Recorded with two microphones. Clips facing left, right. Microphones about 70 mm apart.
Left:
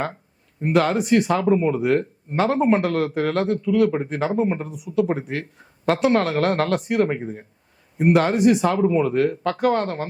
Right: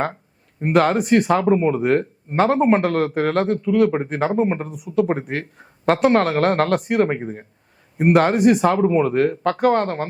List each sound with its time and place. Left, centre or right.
0.6 s speech: right